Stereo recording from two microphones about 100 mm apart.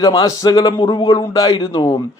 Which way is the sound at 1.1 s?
40° left (ahead or behind).